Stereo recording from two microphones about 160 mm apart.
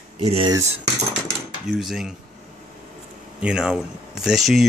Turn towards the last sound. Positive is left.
turn(degrees=0)  # may be behind; listen again after turning